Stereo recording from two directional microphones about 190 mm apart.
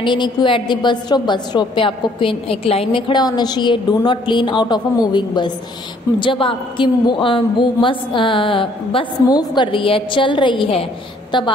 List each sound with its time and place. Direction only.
0.0 s a woman's voice: 25° left (ahead or behind)